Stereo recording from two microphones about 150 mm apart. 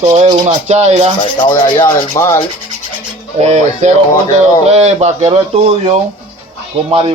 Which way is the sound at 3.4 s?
50° right (ahead or behind).